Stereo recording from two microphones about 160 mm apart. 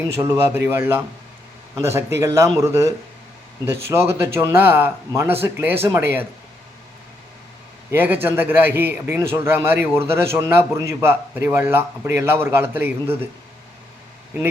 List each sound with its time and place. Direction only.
0.2 s a man's voice: 15° right (ahead or behind)
7.9 s a man's voice: 10° right (ahead or behind)